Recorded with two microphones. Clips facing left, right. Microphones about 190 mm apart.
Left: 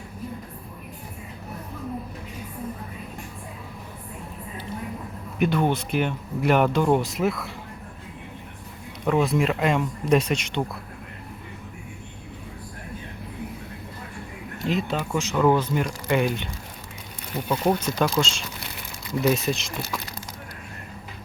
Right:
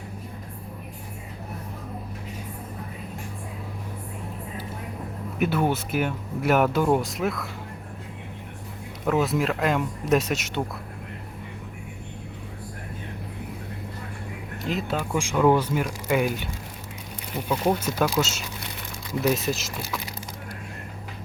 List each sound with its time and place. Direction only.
5.4 s speech: 5° right (ahead or behind)
9.0 s speech: centre (ahead or behind)
14.6 s speech: centre (ahead or behind)
17.5 s speech: centre (ahead or behind)